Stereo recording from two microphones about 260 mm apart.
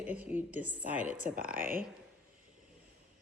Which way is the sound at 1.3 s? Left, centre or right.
Right.